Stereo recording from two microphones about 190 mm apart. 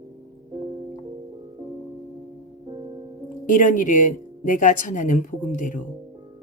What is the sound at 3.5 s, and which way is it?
A woman's voice, 45° left (ahead or behind).